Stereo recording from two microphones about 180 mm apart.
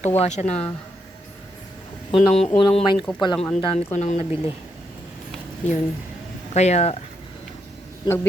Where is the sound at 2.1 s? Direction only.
35° left (ahead or behind).